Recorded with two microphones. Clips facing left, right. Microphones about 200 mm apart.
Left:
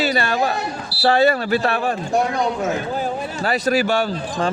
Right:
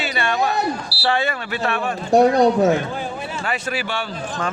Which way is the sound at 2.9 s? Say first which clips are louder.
Left 4 dB; 40° left (ahead or behind).